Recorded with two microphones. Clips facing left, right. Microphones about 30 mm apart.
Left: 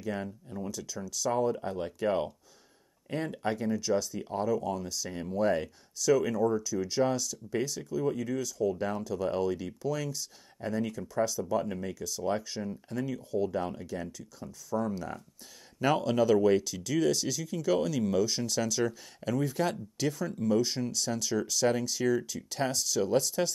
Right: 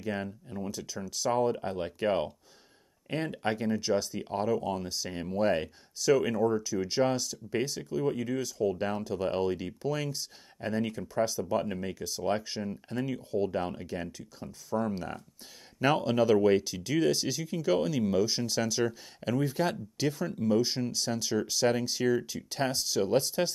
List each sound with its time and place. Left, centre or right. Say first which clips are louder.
0.0 s speech: right 1 dB; centre